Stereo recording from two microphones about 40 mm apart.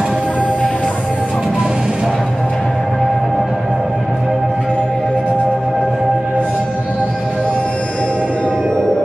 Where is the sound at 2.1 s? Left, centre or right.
Centre.